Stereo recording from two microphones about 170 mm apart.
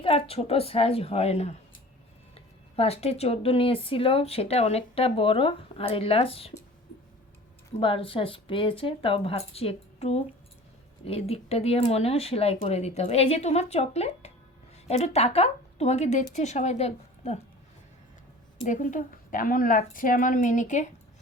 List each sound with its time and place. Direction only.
0.0 s speech: 35° left (ahead or behind)
7.8 s speech: 30° left (ahead or behind)
18.6 s a woman's voice: 50° left (ahead or behind)